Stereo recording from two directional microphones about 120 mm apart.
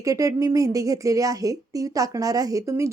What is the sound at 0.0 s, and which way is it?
Speech, 30° right (ahead or behind).